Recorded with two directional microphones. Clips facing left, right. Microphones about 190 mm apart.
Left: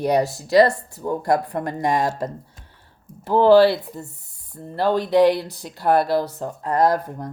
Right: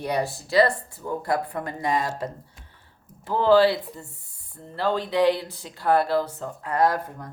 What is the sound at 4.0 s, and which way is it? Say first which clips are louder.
Speech: left 7 dB; 40° left (ahead or behind).